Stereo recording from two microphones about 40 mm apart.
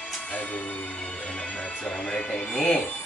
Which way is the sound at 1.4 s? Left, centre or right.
Left.